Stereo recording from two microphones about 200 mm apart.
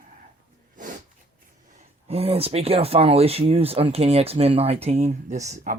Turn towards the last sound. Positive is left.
turn(degrees=-40)  # may be behind; listen again after turning